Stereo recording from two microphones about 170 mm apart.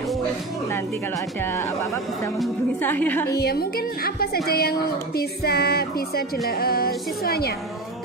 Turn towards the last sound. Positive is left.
turn(degrees=65)  # may be behind; listen again after turning